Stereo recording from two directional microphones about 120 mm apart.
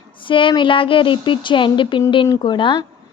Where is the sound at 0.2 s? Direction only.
45° left (ahead or behind).